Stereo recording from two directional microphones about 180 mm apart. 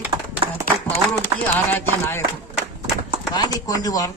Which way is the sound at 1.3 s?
25° right (ahead or behind).